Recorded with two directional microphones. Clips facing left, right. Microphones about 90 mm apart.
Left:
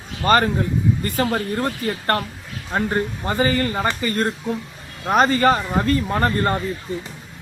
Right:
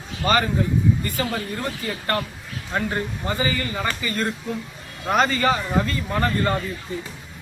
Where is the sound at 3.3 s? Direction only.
50° left (ahead or behind).